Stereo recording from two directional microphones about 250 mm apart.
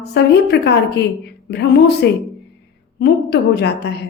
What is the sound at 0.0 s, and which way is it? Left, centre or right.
A woman's voice, left.